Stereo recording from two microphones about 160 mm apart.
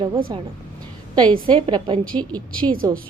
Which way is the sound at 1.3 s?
30° right (ahead or behind).